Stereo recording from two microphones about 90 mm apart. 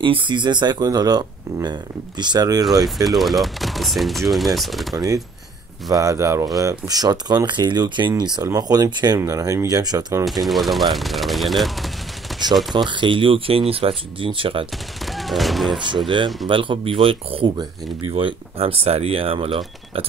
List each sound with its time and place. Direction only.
0.0 s speech: 70° right (ahead or behind); by 3.1 s 45° right (ahead or behind)
3.1 s speech: centre (ahead or behind)
4.9 s speech: 40° right (ahead or behind)
10.4 s speech: centre (ahead or behind)
12.7 s speech: 65° right (ahead or behind)
15.0 s a sound: centre (ahead or behind)
16.4 s speech: 70° right (ahead or behind); by 20.1 s 85° right